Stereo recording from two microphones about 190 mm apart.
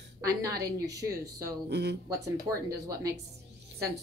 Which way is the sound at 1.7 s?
60° right (ahead or behind).